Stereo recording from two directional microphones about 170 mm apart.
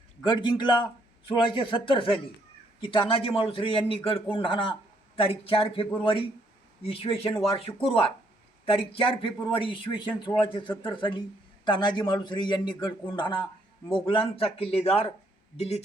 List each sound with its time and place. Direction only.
0.2 s a man's voice: 25° left (ahead or behind)